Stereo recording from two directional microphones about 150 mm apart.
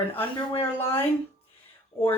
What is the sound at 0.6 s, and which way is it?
Speech, 15° left (ahead or behind).